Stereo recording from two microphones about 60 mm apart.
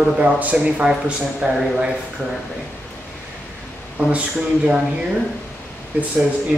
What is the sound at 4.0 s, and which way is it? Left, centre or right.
Speech, right.